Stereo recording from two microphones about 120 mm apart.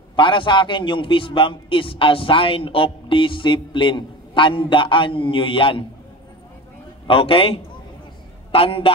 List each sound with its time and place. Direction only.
0.1 s a man's voice: 45° left (ahead or behind)
7.1 s a man's voice: 50° left (ahead or behind)